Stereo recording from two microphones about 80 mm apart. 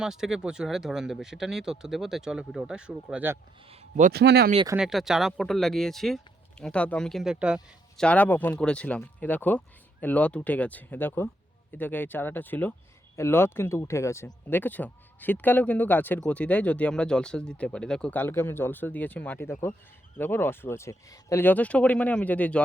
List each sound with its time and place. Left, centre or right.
0.0 s speech: centre
4.8 s speech: centre
6.7 s speech: centre
7.1 s speech: centre
7.9 s speech: centre
8.5 s speech: centre; by 14.3 s left
14.4 s speech: left
18.1 s speech: left
21.4 s speech: centre